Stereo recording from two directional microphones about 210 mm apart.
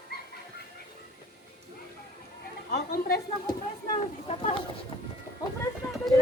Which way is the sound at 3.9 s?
35° left (ahead or behind).